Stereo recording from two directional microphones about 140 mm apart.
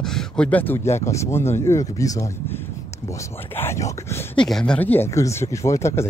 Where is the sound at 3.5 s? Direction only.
20° left (ahead or behind).